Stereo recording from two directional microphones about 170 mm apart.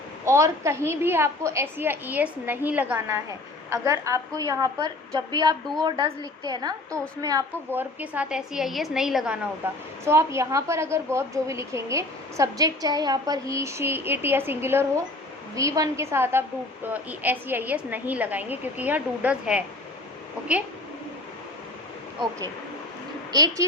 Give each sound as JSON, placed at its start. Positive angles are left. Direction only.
{"t": 0.3, "sound": "a woman's voice", "side_deg": -15}
{"t": 23.3, "sound": "a woman's voice", "side_deg": -20}